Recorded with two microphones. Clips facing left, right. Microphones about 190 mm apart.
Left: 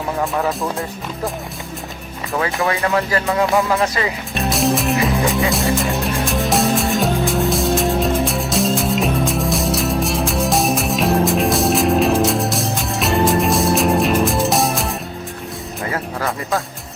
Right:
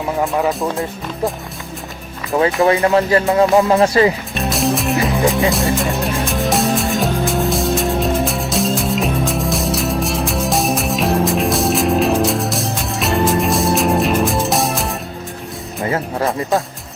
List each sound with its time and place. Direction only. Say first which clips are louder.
2.3 s speech: right 6 dB; 15° right (ahead or behind)
2.6 s speech: right 5 dB; 30° right (ahead or behind)
3.8 s speech: right 7 dB; 30° right (ahead or behind)
4.4 s speech: even; centre (ahead or behind)
5.0 s music: right 2 dB; centre (ahead or behind)
15.8 s speech: right 5 dB; 30° right (ahead or behind)